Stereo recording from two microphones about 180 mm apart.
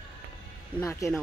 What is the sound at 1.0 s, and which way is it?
Speech, 15° left (ahead or behind).